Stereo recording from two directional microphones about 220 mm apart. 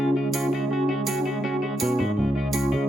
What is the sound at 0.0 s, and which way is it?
Music, centre (ahead or behind).